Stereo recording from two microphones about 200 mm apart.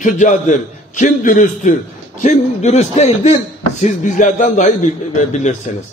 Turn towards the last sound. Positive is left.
turn(degrees=35)  # may be behind; listen again after turning